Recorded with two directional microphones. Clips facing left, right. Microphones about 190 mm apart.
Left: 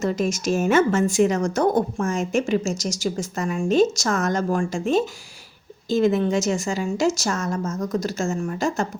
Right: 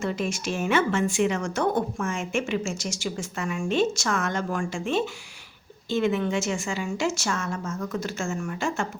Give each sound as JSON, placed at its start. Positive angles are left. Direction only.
{"t": 0.0, "sound": "a woman's voice", "side_deg": 40}